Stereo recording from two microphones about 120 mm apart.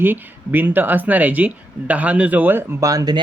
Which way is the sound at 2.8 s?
30° right (ahead or behind).